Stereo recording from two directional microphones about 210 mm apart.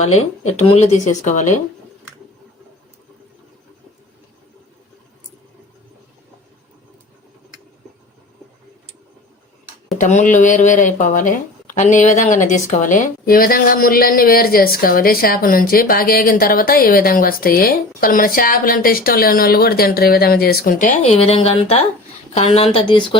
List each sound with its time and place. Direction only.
0.0 s speech: 30° left (ahead or behind)
10.0 s speech: 35° left (ahead or behind)